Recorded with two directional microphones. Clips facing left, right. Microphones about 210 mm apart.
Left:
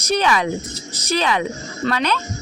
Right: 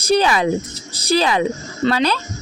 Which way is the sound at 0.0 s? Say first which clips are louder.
Right 3 dB; 30° right (ahead or behind).